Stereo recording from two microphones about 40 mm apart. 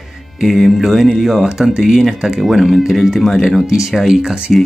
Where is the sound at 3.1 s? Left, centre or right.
Centre.